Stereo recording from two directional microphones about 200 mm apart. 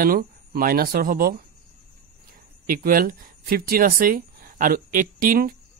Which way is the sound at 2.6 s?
45° right (ahead or behind).